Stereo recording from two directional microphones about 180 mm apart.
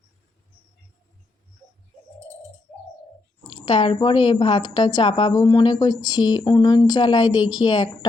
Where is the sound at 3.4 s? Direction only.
30° left (ahead or behind).